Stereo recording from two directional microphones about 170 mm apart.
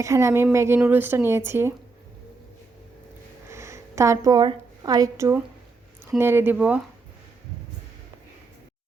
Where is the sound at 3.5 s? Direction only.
15° right (ahead or behind).